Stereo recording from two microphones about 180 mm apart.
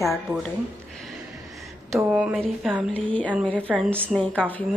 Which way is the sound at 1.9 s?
5° right (ahead or behind).